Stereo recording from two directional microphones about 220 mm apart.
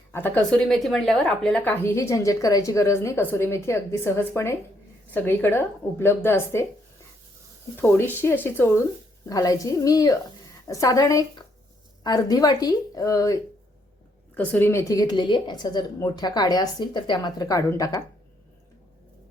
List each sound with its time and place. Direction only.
0.1 s a woman's voice: 10° left (ahead or behind)
7.8 s a woman's voice: 10° left (ahead or behind)